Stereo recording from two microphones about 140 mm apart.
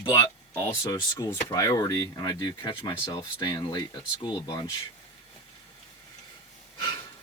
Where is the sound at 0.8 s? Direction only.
30° left (ahead or behind).